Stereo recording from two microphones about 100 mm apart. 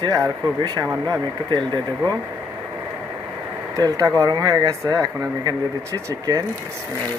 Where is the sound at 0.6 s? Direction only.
45° right (ahead or behind).